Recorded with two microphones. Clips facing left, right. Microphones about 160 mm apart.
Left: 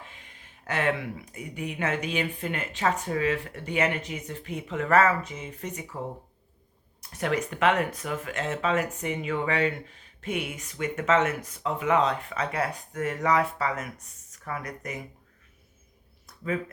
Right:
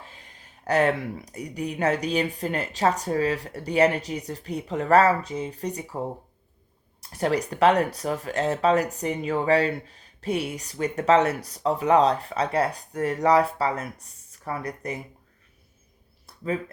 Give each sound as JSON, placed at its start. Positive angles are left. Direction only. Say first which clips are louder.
{"t": 0.0, "sound": "speech", "louder": "right 1 dB", "side_deg": -35}
{"t": 7.1, "sound": "speech", "louder": "right 3 dB", "side_deg": -35}
{"t": 16.2, "sound": "a sound", "louder": "right 2 dB", "side_deg": -30}